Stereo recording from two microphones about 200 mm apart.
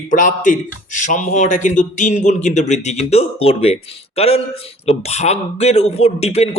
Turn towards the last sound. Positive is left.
turn(degrees=30)  # may be behind; listen again after turning